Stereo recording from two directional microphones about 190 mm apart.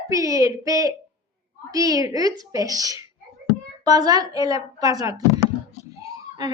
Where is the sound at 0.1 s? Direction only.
15° right (ahead or behind).